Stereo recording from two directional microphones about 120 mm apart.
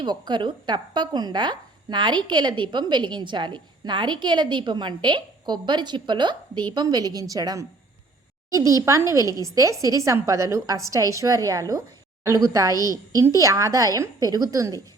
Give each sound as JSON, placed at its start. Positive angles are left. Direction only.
{"t": 0.0, "sound": "a woman's voice", "side_deg": -40}
{"t": 12.7, "sound": "a woman's voice", "side_deg": 30}
{"t": 13.2, "sound": "a woman's voice", "side_deg": -25}